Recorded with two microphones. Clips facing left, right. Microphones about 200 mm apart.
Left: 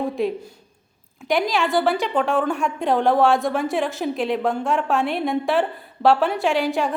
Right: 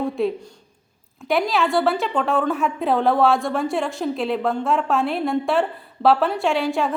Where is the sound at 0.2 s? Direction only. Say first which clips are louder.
Right 1 dB; centre (ahead or behind).